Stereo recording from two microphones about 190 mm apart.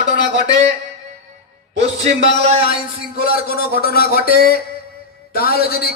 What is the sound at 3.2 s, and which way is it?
A man's voice, 50° left (ahead or behind).